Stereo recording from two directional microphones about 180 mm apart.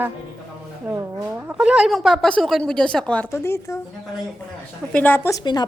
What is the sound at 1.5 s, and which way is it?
Speech, 5° right (ahead or behind).